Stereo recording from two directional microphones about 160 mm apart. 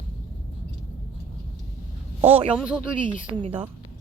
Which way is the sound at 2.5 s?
5° right (ahead or behind).